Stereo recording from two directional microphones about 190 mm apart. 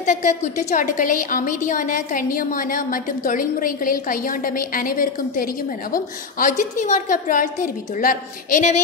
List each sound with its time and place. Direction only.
0.0 s a woman's voice: 40° left (ahead or behind)